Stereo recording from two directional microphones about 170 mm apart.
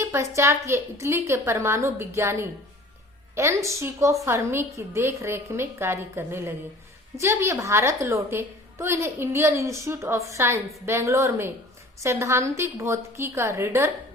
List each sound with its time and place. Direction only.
0.0 s a woman's voice: 15° right (ahead or behind)